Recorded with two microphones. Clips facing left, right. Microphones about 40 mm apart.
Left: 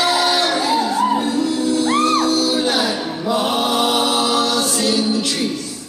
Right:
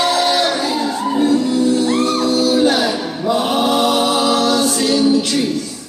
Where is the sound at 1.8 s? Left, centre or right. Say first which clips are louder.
Even; left.